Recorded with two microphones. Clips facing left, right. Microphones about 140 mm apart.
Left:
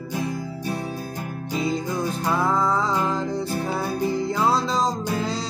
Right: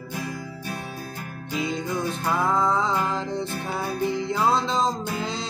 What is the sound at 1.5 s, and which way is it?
Music, 35° left (ahead or behind).